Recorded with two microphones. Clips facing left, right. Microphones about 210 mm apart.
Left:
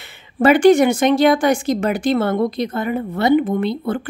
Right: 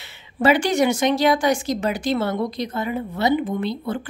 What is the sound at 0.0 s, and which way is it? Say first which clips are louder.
A woman's voice: left 4 dB; 55° left (ahead or behind).